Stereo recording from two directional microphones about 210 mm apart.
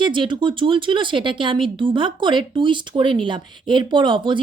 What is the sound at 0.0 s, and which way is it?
Speech, 25° right (ahead or behind).